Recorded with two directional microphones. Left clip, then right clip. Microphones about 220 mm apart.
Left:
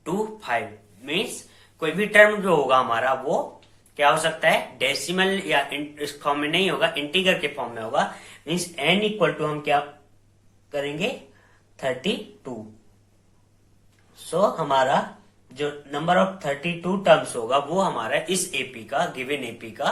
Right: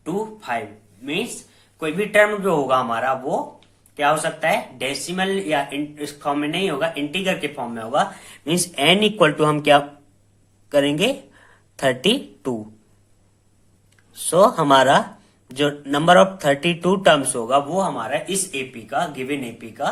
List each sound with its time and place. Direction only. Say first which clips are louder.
0.0 s a sound: right 1 dB; 25° right (ahead or behind)
1.0 s speech: right 1 dB; 25° right (ahead or behind); by 12.5 s 45° right (ahead or behind)
14.3 s speech: right 7 dB; 45° right (ahead or behind); by 19.9 s 25° right (ahead or behind)